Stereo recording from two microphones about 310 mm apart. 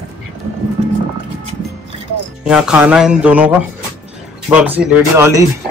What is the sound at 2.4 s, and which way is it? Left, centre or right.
Speech, centre.